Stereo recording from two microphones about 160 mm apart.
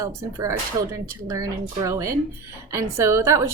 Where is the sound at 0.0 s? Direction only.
20° right (ahead or behind).